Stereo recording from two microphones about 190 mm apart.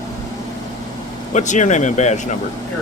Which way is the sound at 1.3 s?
40° left (ahead or behind).